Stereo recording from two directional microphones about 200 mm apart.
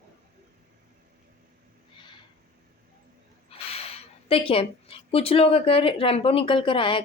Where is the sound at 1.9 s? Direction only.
25° left (ahead or behind).